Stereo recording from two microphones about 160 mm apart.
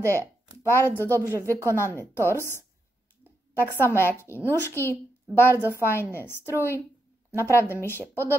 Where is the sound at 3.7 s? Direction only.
15° right (ahead or behind).